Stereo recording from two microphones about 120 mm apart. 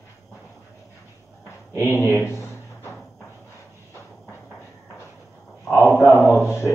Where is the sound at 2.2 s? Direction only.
25° left (ahead or behind).